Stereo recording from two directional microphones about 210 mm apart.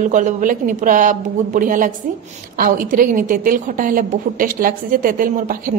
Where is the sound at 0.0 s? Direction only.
35° right (ahead or behind).